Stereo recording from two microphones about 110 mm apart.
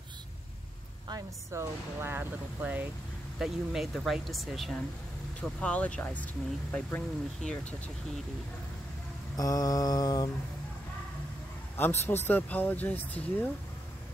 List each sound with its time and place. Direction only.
1.5 s speech: 25° right (ahead or behind)
3.3 s speech: 5° right (ahead or behind)
5.4 s speech: 10° left (ahead or behind)
9.4 s mantra: 35° left (ahead or behind)
11.7 s speech: 20° left (ahead or behind)